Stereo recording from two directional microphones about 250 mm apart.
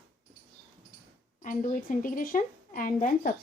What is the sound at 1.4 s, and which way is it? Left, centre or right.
A woman's voice, left.